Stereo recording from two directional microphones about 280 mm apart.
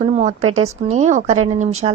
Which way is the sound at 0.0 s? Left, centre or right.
Right.